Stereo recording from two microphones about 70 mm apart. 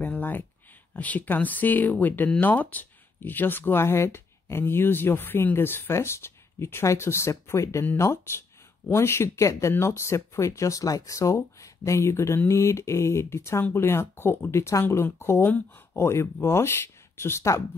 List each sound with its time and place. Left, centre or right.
0.0 s a sound: left
0.9 s speech: left
16.1 s speech: left